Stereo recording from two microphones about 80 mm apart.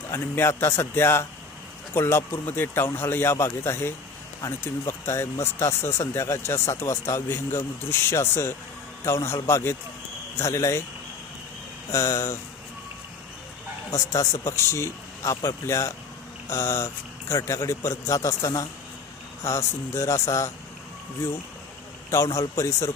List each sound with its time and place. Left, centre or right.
0.1 s speech: left
11.9 s speech: left
13.9 s speech: left
22.1 s speech: left